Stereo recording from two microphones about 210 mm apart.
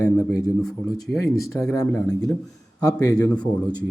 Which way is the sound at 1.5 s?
15° left (ahead or behind).